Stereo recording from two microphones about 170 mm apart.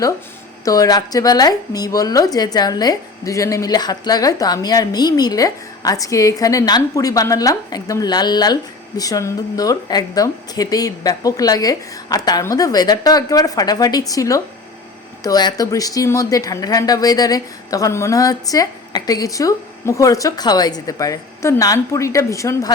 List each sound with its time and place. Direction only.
0.6 s speech: 20° left (ahead or behind)